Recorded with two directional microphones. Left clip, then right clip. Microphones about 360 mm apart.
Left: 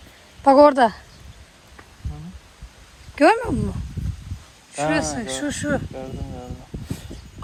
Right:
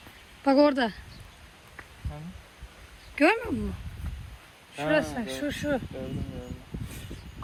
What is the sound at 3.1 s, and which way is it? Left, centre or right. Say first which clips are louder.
Speech: left 7 dB; centre.